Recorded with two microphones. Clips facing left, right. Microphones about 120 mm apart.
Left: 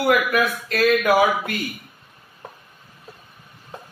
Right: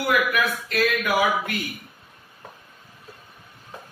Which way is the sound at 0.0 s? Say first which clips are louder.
Left 4 dB; 35° left (ahead or behind).